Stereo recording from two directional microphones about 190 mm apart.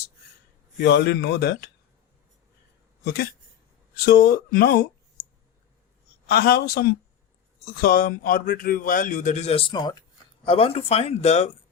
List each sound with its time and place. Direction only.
0.8 s speech: 60° left (ahead or behind)
3.0 s speech: 55° left (ahead or behind)
6.2 s speech: 50° left (ahead or behind); by 11.5 s 35° left (ahead or behind)